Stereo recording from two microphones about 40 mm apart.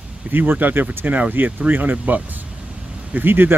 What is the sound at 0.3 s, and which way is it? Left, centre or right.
Speech, right.